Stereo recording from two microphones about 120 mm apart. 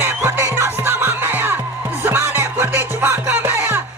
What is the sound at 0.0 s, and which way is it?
Music, 20° right (ahead or behind).